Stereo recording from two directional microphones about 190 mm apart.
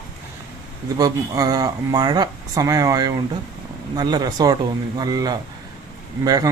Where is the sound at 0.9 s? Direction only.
20° right (ahead or behind).